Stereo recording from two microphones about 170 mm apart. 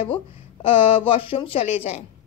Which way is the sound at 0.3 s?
35° left (ahead or behind).